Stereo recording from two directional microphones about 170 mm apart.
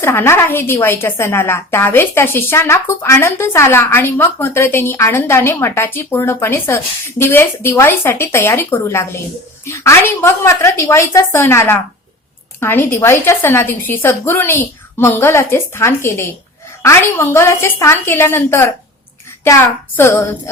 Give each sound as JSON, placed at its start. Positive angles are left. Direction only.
{"t": 0.0, "sound": "a woman's voice", "side_deg": 15}